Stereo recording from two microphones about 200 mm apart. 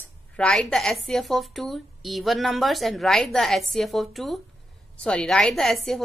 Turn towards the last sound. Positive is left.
turn(degrees=0)  # may be behind; listen again after turning